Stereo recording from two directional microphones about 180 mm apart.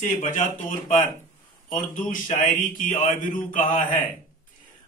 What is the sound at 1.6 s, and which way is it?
A man's voice, 45° left (ahead or behind).